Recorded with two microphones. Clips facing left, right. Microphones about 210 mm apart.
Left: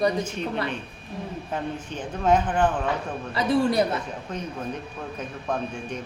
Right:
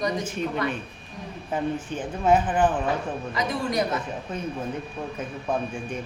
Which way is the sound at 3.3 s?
30° left (ahead or behind).